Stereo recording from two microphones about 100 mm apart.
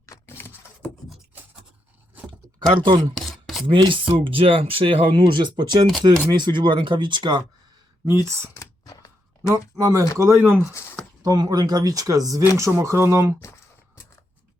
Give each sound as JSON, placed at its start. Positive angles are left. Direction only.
{"t": 0.0, "sound": "a sound", "side_deg": 35}
{"t": 0.3, "sound": "a sound", "side_deg": 20}
{"t": 2.6, "sound": "speech", "side_deg": -50}
{"t": 3.2, "sound": "chopping", "side_deg": 0}
{"t": 3.7, "sound": "speech", "side_deg": -55}
{"t": 8.0, "sound": "speech", "side_deg": -30}
{"t": 8.5, "sound": "a sound", "side_deg": 35}
{"t": 9.5, "sound": "speech", "side_deg": -30}
{"t": 11.2, "sound": "speech", "side_deg": -40}